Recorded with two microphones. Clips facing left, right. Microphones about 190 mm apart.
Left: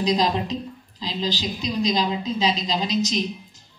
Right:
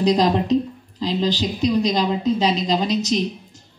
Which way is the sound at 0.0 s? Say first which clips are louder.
Right 4 dB; 60° right (ahead or behind).